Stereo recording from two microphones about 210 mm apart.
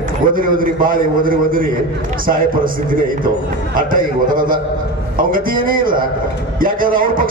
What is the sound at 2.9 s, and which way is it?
A man's voice, 40° right (ahead or behind).